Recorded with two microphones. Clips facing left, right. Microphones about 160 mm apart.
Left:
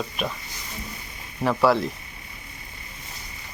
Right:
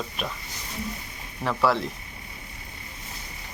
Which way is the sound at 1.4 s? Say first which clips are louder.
Left 4 dB; 5° left (ahead or behind).